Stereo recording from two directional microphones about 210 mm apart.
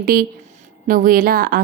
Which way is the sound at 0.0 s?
45° right (ahead or behind).